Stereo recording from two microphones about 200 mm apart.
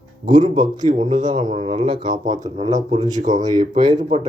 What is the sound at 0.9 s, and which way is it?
Speech, 40° right (ahead or behind).